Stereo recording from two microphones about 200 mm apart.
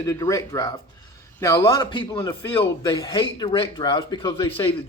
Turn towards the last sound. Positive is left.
turn(degrees=25)  # may be behind; listen again after turning